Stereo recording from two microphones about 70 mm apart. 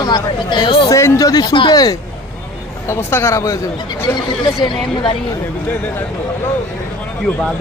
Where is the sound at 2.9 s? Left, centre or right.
Left.